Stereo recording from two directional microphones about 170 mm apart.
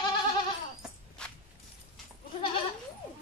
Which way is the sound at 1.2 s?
5° left (ahead or behind).